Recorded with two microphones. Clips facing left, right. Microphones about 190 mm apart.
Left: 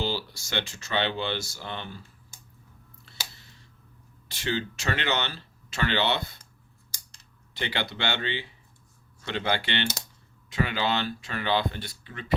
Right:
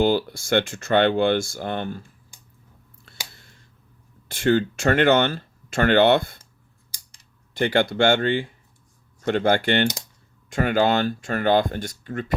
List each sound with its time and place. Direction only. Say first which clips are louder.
0.0 s speech: right 11 dB; 55° right (ahead or behind)
4.3 s speech: right 11 dB; 50° right (ahead or behind)
6.9 s scissors: left 1 dB; 15° right (ahead or behind)
7.5 s speech: right 11 dB; 50° right (ahead or behind)